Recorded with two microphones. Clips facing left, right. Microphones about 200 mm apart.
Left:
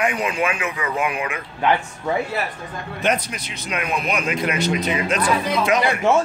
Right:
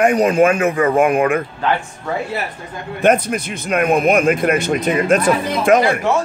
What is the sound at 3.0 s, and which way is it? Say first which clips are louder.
Speech: right 8 dB; 50° right (ahead or behind).